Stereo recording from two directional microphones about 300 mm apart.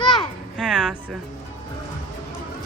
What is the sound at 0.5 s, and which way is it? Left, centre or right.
Music, centre.